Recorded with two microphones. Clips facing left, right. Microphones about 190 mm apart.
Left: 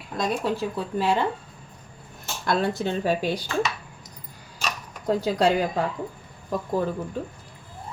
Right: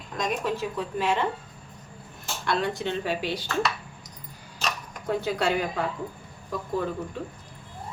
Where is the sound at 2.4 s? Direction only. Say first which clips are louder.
Left 3 dB; 40° left (ahead or behind).